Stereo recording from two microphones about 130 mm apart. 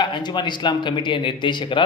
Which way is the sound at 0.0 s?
35° left (ahead or behind).